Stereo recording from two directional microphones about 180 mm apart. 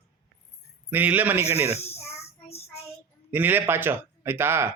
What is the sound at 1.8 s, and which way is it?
Speech, 35° left (ahead or behind).